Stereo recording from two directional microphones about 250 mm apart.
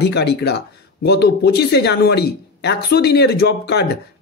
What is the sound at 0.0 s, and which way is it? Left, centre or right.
Speech, left.